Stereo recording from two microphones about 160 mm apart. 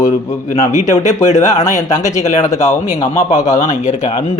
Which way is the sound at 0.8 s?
50° left (ahead or behind).